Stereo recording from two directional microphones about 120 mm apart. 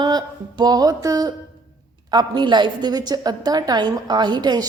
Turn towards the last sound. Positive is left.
turn(degrees=-35)  # may be behind; listen again after turning